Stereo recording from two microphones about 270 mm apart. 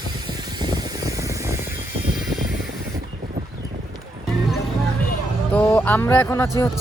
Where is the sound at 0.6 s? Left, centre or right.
Centre.